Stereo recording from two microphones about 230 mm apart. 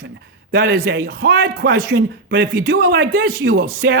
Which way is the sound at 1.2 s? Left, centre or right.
Right.